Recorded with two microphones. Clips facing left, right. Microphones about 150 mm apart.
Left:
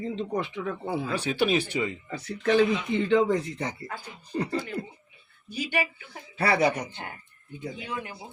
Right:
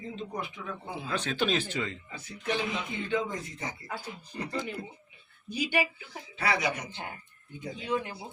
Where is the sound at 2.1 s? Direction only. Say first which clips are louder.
Left 12 dB; 70° left (ahead or behind).